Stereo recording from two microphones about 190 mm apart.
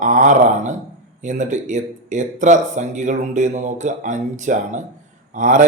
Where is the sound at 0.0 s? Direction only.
40° right (ahead or behind).